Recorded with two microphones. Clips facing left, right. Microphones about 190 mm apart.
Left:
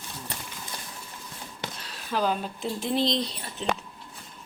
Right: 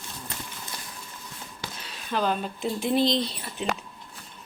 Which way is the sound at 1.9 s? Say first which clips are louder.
Even; 5° left (ahead or behind).